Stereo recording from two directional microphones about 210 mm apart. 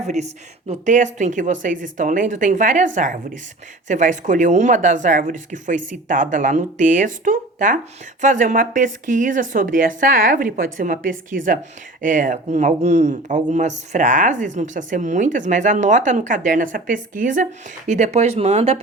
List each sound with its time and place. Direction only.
0.0 s speech: 30° right (ahead or behind)